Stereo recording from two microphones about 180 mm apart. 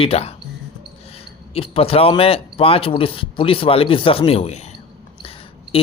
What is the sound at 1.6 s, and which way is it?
Speech, 30° left (ahead or behind).